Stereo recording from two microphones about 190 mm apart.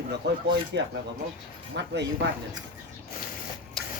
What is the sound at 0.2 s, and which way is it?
Speech, 65° right (ahead or behind).